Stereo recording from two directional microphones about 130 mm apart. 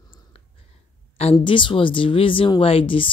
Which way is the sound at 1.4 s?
40° left (ahead or behind).